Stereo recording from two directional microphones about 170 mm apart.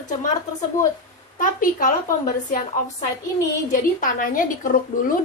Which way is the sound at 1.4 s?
50° left (ahead or behind).